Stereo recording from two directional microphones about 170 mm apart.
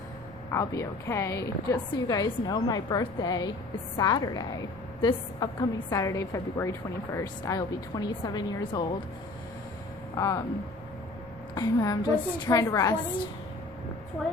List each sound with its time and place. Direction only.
0.5 s a woman's voice: 15° left (ahead or behind)
10.2 s a woman's voice: 20° left (ahead or behind)
11.5 s a woman's voice: 20° left (ahead or behind)